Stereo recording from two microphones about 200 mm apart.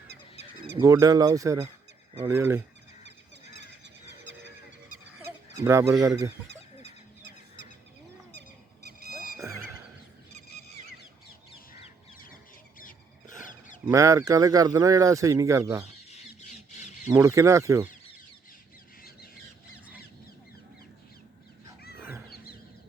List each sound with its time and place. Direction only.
0.8 s speech: 15° right (ahead or behind)
5.6 s speech: 15° right (ahead or behind)
8.4 s a sound: 55° right (ahead or behind)
9.4 s music: 15° right (ahead or behind)
12.8 s wild animals: 40° left (ahead or behind)
13.8 s speech: 15° right (ahead or behind)
17.1 s speech: 15° right (ahead or behind)